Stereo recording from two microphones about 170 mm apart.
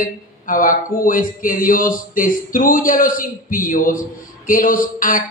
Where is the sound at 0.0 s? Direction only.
55° left (ahead or behind).